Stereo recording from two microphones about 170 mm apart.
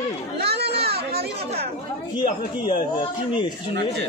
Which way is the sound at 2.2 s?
30° left (ahead or behind).